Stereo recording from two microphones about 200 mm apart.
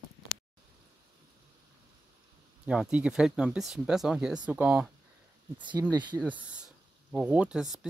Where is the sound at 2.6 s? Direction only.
5° right (ahead or behind).